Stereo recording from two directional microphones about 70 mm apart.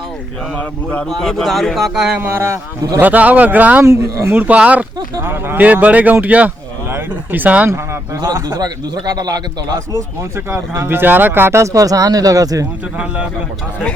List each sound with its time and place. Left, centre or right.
0.5 s speech: centre
1.2 s speech: centre
2.1 s speech: right
3.0 s a man's voice: right
3.8 s speech: right
4.3 s a man's voice: right
5.2 s a man's voice: right
8.2 s a man's voice: right
10.3 s speech: right
11.6 s speech: right